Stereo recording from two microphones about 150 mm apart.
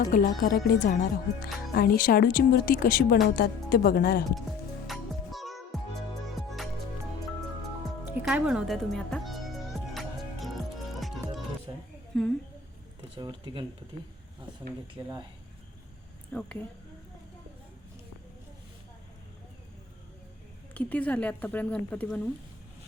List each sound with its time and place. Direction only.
0.1 s a woman's voice: 70° left (ahead or behind)
3.2 s speech: 85° left
4.9 s music: centre (ahead or behind)
8.2 s speech: 5° right (ahead or behind)
9.9 s music: centre (ahead or behind)
11.7 s a sound: 30° right (ahead or behind)
12.1 s speech: 5° left (ahead or behind)
13.1 s speech: 30° right (ahead or behind)
16.3 s speech: 10° left (ahead or behind)
20.7 s speech: 10° left (ahead or behind)